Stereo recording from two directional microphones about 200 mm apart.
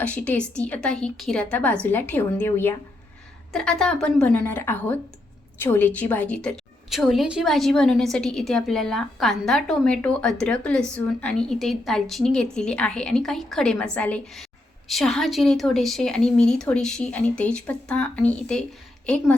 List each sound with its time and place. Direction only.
0.0 s a woman's voice: 5° left (ahead or behind)